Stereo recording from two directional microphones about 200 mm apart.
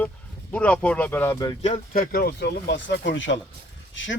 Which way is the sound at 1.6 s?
40° left (ahead or behind).